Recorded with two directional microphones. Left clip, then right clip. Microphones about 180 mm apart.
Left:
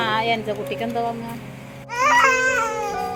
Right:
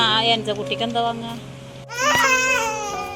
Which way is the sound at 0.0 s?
5° left (ahead or behind).